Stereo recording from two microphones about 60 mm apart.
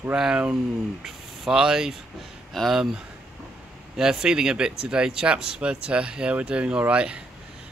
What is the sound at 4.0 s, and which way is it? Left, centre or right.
Speech, centre.